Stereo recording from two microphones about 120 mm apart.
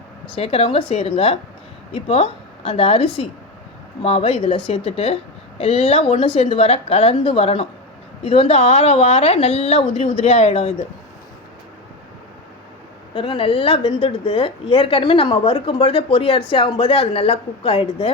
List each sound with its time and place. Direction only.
0.3 s a woman's voice: 55° left (ahead or behind)
13.1 s a woman's voice: 45° left (ahead or behind)